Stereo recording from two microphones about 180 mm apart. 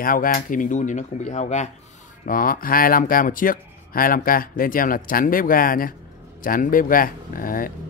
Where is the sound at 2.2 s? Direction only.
50° left (ahead or behind).